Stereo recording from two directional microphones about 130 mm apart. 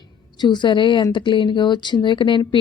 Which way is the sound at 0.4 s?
35° left (ahead or behind).